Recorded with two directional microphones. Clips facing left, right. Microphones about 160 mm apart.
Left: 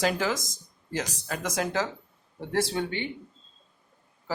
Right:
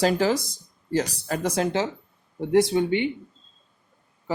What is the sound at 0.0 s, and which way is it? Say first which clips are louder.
Speech: right 6 dB; 35° right (ahead or behind).